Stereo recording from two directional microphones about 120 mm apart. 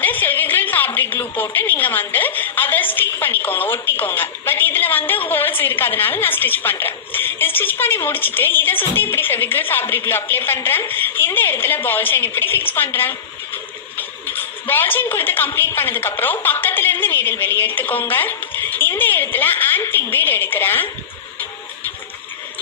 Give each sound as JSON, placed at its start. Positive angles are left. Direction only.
{"t": 0.0, "sound": "a woman's voice", "side_deg": 15}